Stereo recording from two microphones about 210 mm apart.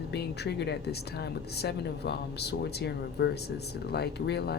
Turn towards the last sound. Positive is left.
turn(degrees=50)  # may be behind; listen again after turning